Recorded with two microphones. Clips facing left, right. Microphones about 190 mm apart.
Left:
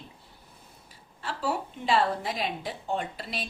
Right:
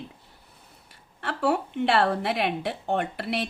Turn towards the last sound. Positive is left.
turn(degrees=-65)  # may be behind; listen again after turning